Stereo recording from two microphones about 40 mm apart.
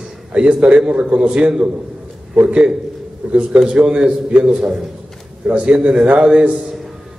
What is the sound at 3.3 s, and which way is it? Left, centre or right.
Speech, right.